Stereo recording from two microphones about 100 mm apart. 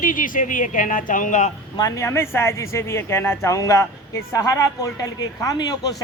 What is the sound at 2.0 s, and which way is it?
Speech, 25° left (ahead or behind).